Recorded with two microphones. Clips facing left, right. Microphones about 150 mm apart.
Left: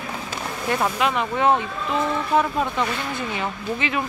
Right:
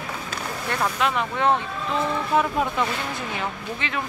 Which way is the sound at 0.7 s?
10° left (ahead or behind).